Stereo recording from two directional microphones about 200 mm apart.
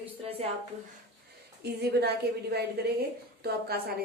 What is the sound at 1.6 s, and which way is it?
A woman's voice, 55° right (ahead or behind).